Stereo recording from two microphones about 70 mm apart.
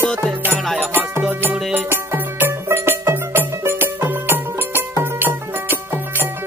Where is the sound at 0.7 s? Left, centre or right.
Right.